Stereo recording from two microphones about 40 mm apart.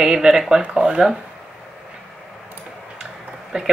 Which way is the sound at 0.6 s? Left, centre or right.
Right.